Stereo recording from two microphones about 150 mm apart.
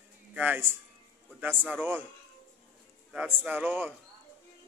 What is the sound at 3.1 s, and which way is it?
Speech, 10° right (ahead or behind).